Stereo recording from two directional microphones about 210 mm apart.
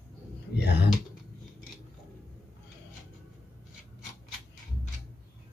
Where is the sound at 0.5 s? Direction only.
50° left (ahead or behind).